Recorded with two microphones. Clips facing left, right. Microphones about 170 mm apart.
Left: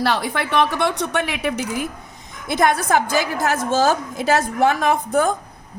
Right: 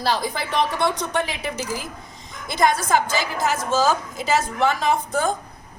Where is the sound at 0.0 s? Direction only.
65° left (ahead or behind).